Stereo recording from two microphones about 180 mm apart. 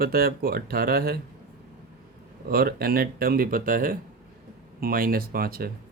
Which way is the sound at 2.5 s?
55° right (ahead or behind).